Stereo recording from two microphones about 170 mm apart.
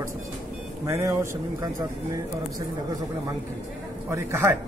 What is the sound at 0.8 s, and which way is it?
Speech, 15° right (ahead or behind).